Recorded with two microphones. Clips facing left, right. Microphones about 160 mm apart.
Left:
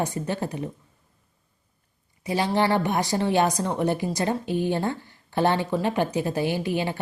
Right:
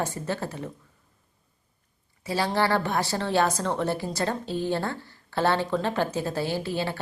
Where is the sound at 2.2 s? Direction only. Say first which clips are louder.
Left 2 dB; 15° left (ahead or behind).